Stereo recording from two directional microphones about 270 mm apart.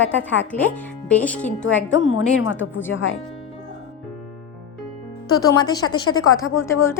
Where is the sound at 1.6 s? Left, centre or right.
Left.